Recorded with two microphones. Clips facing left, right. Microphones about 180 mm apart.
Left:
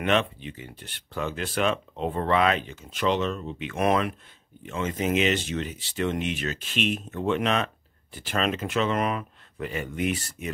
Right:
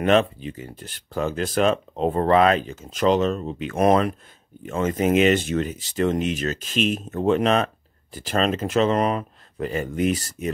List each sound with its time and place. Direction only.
0.0 s speech: 40° right (ahead or behind)
4.6 s speech: 45° right (ahead or behind)